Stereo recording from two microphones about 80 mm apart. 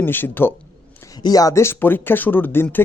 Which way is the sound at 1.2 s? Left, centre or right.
Left.